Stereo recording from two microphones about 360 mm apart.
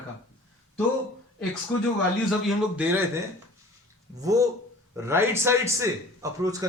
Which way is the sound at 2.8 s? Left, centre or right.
Centre.